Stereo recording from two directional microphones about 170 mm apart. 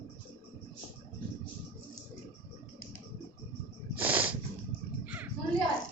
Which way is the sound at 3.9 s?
10° right (ahead or behind).